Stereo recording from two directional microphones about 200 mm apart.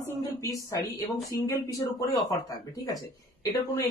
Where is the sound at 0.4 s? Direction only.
15° left (ahead or behind).